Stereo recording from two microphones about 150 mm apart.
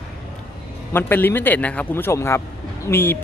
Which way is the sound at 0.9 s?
15° left (ahead or behind).